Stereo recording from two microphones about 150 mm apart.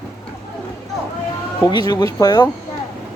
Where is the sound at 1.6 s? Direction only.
25° left (ahead or behind).